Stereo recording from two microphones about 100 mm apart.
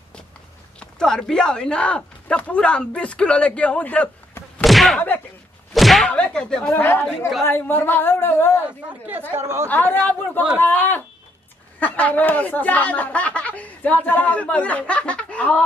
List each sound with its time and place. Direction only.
0.7 s speech: 5° left (ahead or behind)
4.6 s slam: centre (ahead or behind)
5.7 s a sound: centre (ahead or behind)
6.1 s speech: 10° left (ahead or behind)
6.7 s a woman's voice: 20° left (ahead or behind)
9.3 s speech: 25° right (ahead or behind)
9.7 s a woman's voice: 20° left (ahead or behind)